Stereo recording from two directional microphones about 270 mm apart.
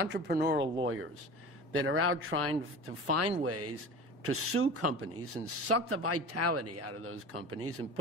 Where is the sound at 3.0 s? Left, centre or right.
Right.